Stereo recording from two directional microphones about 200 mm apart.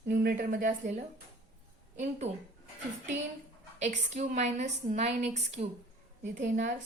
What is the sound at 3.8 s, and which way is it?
A woman's voice, 35° right (ahead or behind).